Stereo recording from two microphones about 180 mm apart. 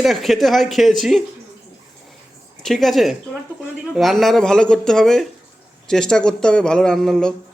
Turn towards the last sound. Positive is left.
turn(degrees=5)  # may be behind; listen again after turning